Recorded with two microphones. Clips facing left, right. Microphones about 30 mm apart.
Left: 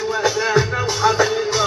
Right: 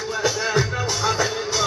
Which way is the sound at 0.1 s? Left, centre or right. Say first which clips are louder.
Left 4 dB; centre.